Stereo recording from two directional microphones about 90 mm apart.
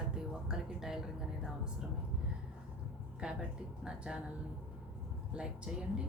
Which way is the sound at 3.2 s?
10° right (ahead or behind).